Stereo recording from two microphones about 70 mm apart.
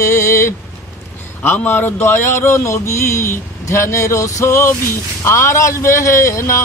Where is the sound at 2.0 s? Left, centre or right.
Left.